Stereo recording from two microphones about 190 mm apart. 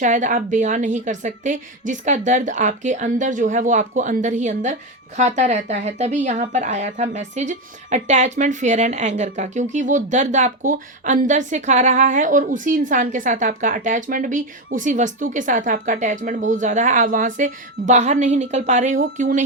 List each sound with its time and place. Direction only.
0.0 s a woman's voice: 40° right (ahead or behind)